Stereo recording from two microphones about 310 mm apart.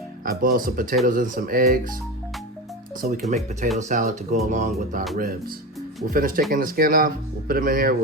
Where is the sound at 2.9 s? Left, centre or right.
Right.